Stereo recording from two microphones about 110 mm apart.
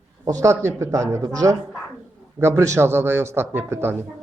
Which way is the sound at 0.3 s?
30° right (ahead or behind).